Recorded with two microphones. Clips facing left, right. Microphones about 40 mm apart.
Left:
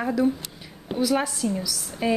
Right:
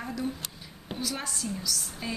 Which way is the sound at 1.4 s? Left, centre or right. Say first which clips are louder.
Left 9 dB; left.